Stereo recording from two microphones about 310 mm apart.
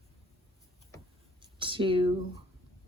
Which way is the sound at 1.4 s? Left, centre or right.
Centre.